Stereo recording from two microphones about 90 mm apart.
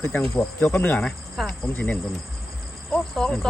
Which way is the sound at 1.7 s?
20° left (ahead or behind).